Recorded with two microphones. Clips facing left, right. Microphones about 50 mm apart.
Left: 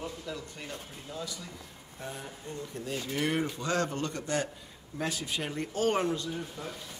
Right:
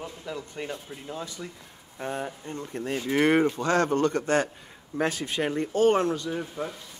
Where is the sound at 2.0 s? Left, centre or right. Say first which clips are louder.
Right 9 dB; right.